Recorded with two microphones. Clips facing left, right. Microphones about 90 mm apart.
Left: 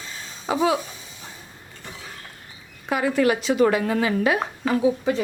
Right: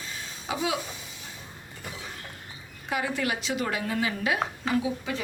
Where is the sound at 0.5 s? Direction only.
45° left (ahead or behind).